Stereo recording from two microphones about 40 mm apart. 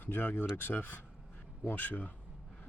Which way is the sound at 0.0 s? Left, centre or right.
Left.